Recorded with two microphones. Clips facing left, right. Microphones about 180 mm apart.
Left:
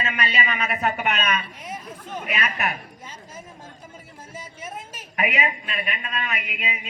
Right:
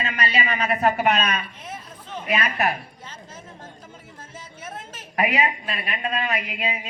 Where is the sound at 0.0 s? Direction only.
35° right (ahead or behind).